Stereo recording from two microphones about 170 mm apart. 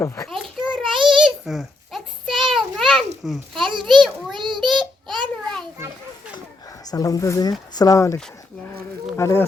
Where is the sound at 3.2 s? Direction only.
Centre (ahead or behind).